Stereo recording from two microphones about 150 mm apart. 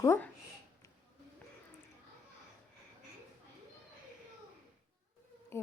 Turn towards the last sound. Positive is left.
turn(degrees=15)  # may be behind; listen again after turning